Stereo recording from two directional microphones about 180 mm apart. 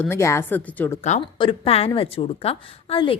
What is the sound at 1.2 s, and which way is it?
A woman's voice, 30° left (ahead or behind).